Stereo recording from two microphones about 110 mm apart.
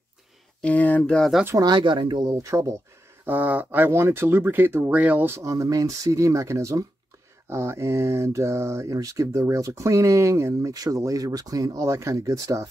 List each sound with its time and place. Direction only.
0.6 s speech: 15° left (ahead or behind)
1.1 s speech: centre (ahead or behind)
1.6 s speech: 45° right (ahead or behind)
2.3 s speech: 30° right (ahead or behind)
3.3 s speech: 15° right (ahead or behind); by 12.6 s 30° right (ahead or behind)